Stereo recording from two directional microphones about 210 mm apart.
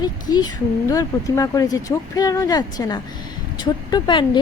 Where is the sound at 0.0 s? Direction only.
20° left (ahead or behind).